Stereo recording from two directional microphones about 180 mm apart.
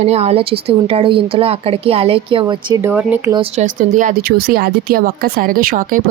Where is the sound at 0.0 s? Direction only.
35° right (ahead or behind).